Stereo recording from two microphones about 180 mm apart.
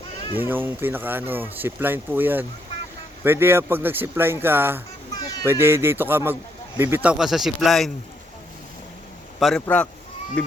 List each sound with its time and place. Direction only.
0.3 s speech: 10° right (ahead or behind)
5.2 s a sound: 20° left (ahead or behind)
5.5 s speech: 15° right (ahead or behind)
9.6 s speech: 10° left (ahead or behind)